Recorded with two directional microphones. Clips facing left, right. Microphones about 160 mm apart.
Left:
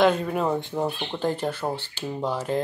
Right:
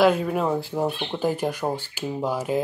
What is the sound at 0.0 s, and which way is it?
Speech, 5° right (ahead or behind).